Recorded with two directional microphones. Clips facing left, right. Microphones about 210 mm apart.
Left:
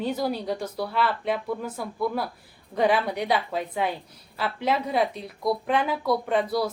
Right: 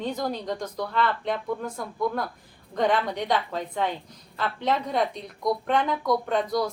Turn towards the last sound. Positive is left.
turn(degrees=5)  # may be behind; listen again after turning